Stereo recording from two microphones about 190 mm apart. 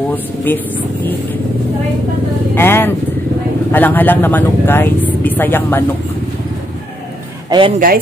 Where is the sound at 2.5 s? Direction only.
10° left (ahead or behind).